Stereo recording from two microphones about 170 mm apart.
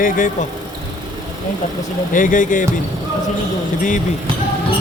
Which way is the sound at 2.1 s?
50° left (ahead or behind).